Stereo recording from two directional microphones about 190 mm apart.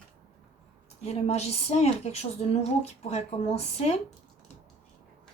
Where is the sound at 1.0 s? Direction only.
35° left (ahead or behind).